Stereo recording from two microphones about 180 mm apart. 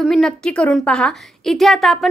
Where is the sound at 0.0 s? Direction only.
Centre (ahead or behind).